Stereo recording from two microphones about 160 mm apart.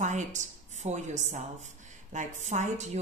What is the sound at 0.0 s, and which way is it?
A woman's voice, 50° right (ahead or behind).